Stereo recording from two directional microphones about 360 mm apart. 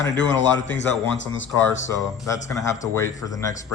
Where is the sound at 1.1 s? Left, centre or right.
Left.